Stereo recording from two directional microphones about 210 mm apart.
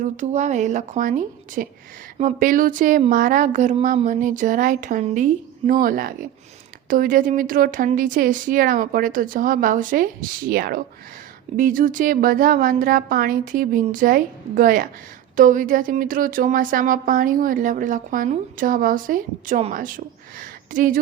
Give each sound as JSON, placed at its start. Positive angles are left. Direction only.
{"t": 0.0, "sound": "speech", "side_deg": -35}